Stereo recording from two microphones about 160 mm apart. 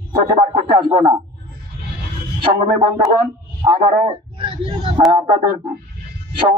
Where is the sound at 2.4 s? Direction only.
30° right (ahead or behind).